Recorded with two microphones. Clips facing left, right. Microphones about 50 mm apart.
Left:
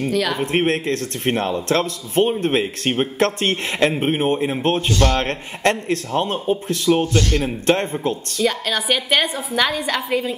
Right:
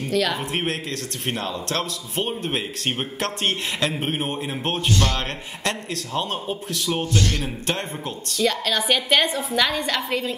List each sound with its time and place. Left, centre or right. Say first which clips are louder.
0.1 s a woman's voice: right 2 dB; centre
0.4 s a man's voice: left 7 dB; left
3.9 s a man's voice: left 7 dB; left
8.4 s a woman's voice: right 1 dB; centre